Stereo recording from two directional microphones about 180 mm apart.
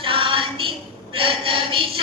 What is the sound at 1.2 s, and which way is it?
Chant, 30° right (ahead or behind).